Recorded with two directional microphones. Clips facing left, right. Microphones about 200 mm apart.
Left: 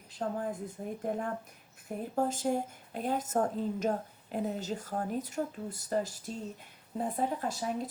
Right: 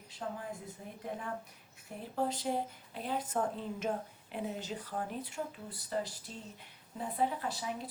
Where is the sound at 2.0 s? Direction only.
45° left (ahead or behind).